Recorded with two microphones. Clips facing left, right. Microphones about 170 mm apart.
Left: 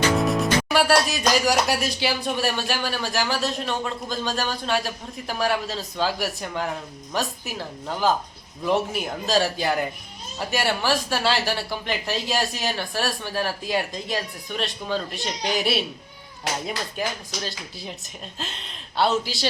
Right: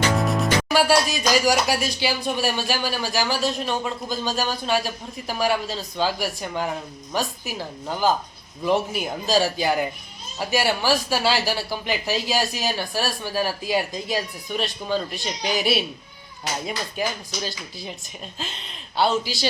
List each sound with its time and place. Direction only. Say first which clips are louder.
0.2 s speech: left 1 dB; centre (ahead or behind)